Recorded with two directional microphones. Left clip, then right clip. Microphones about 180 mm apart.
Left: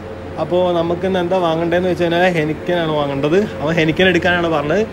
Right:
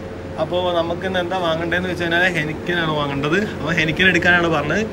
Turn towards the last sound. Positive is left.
turn(degrees=15)  # may be behind; listen again after turning